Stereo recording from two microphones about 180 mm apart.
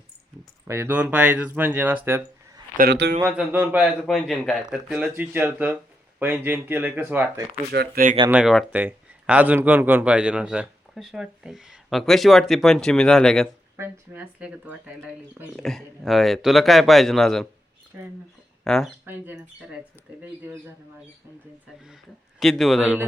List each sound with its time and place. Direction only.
0.7 s a man's voice: 10° right (ahead or behind)
2.7 s a man's voice: 65° right (ahead or behind)
3.2 s a man's voice: 10° right (ahead or behind)
7.7 s speech: 65° right (ahead or behind)
8.3 s speech: 5° right (ahead or behind)
13.7 s speech: 10° right (ahead or behind)
17.9 s a man's voice: 10° right (ahead or behind)
18.6 s speech: centre (ahead or behind)
19.0 s a man's voice: 10° right (ahead or behind)
20.4 s a man's voice: 15° right (ahead or behind)
22.4 s speech: centre (ahead or behind)